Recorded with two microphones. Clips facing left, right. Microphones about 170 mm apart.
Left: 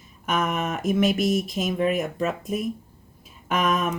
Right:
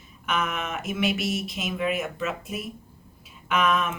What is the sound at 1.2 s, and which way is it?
Speech, centre (ahead or behind).